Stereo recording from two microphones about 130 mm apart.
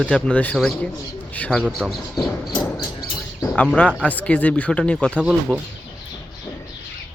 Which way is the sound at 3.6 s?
10° left (ahead or behind).